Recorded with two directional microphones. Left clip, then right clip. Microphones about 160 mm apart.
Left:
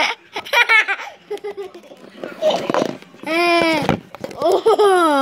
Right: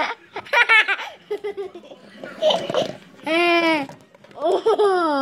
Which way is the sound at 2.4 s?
25° left (ahead or behind).